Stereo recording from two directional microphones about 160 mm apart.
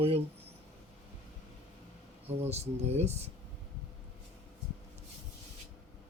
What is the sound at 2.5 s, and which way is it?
Speech, 40° right (ahead or behind).